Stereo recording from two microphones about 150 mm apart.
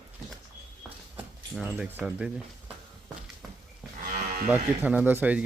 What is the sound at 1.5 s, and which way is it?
Speech, 5° right (ahead or behind).